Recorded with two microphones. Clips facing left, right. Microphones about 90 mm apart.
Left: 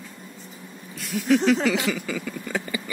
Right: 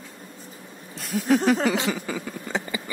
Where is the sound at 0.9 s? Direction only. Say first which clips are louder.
Even; 30° right (ahead or behind).